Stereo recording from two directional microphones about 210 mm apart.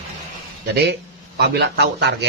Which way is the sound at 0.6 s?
50° right (ahead or behind).